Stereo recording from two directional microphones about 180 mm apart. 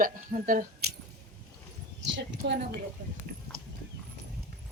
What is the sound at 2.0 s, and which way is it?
Speech, 75° right (ahead or behind).